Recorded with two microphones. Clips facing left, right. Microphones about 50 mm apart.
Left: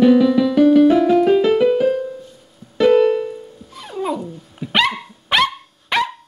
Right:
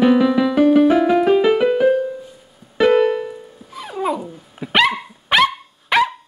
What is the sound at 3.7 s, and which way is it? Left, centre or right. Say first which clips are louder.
Dog: right 1 dB; centre.